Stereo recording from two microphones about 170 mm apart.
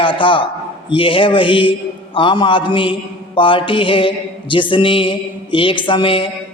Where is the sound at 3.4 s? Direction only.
30° left (ahead or behind).